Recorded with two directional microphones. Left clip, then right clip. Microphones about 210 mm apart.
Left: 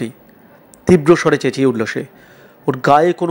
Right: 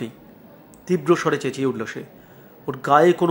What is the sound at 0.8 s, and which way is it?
Speech, 25° left (ahead or behind).